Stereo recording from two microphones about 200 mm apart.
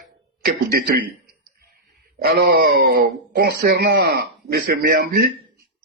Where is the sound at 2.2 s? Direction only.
55° right (ahead or behind).